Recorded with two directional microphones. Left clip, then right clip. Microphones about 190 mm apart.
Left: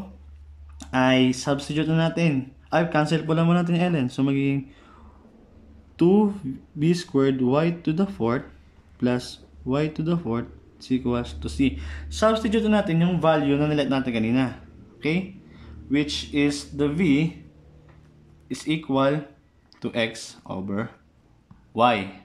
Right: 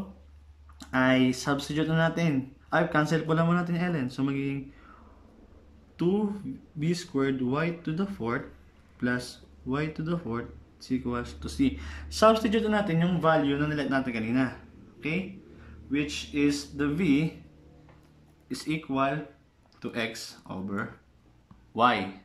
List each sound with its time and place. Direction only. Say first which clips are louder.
0.7 s speech: left 4 dB; 10° left (ahead or behind)
5.9 s speech: left 8 dB; 20° left (ahead or behind)
9.7 s speech: left 6 dB; 15° left (ahead or behind)
18.5 s speech: left 5 dB; 15° left (ahead or behind)
18.9 s speech: left 6 dB; 25° left (ahead or behind)
19.8 s speech: left 6 dB; 15° left (ahead or behind)